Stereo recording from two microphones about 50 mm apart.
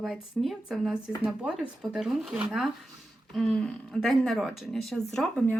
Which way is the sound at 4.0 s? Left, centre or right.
Centre.